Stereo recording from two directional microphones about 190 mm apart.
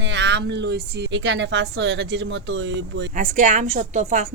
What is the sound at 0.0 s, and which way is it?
A woman's voice, 70° right (ahead or behind).